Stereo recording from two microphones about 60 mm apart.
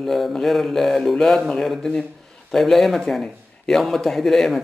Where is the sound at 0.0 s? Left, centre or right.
Centre.